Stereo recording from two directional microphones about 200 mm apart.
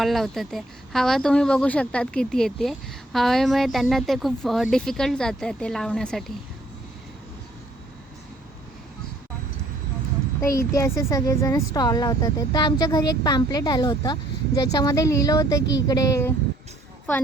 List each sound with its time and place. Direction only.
0.0 s speech: centre (ahead or behind)
10.4 s speech: 15° left (ahead or behind)